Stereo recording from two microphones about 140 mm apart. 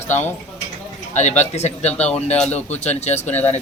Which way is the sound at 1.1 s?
55° left (ahead or behind).